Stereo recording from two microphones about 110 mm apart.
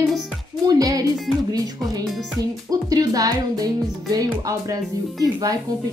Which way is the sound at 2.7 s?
35° right (ahead or behind).